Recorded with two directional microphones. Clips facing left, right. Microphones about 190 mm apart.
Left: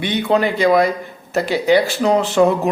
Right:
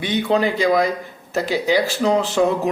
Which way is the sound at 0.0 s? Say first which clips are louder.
Left 2 dB; 60° left (ahead or behind).